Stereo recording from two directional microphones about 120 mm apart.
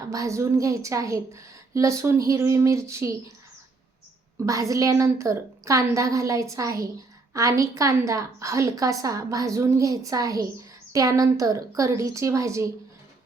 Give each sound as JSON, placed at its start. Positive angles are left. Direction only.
{"t": 0.1, "sound": "a woman's voice", "side_deg": -25}
{"t": 4.4, "sound": "a woman's voice", "side_deg": -30}